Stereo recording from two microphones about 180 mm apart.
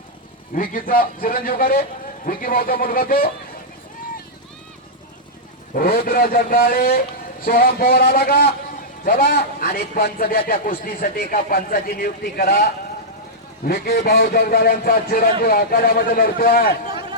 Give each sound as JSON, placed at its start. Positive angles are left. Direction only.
{"t": 0.5, "sound": "a man's voice", "side_deg": 50}
{"t": 5.7, "sound": "a man's voice", "side_deg": 55}
{"t": 13.7, "sound": "a man's voice", "side_deg": 60}